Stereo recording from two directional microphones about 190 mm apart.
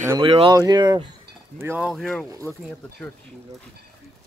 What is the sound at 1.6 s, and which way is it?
Speech, 10° right (ahead or behind).